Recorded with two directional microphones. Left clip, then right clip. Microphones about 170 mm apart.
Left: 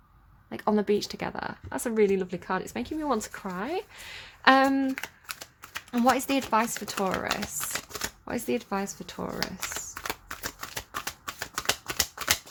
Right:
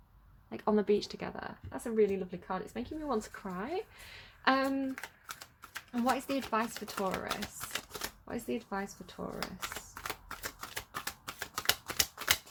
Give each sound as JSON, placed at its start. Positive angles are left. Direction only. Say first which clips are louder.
{"t": 0.5, "sound": "speech", "louder": "left 4 dB", "side_deg": 20}
{"t": 3.4, "sound": "speech", "louder": "left 6 dB", "side_deg": 20}
{"t": 4.9, "sound": "typewriter", "louder": "left 7 dB", "side_deg": 10}
{"t": 5.9, "sound": "speech", "louder": "left 8 dB", "side_deg": 40}
{"t": 7.4, "sound": "a sound", "louder": "left 6 dB", "side_deg": 15}
{"t": 8.2, "sound": "speech", "louder": "left 9 dB", "side_deg": 40}
{"t": 9.4, "sound": "a sound", "louder": "left 7 dB", "side_deg": 5}
{"t": 10.1, "sound": "typewriter", "louder": "left 5 dB", "side_deg": 10}